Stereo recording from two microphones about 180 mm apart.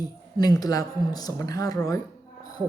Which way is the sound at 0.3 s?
20° left (ahead or behind).